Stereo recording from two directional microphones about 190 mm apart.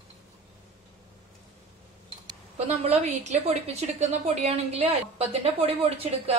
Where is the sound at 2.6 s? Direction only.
35° right (ahead or behind).